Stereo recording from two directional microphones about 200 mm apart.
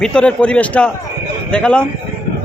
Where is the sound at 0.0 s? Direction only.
5° left (ahead or behind).